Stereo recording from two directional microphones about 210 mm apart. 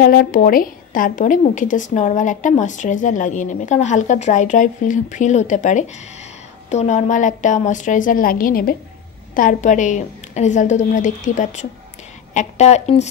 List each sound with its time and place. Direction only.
0.0 s a woman's voice: 45° left (ahead or behind)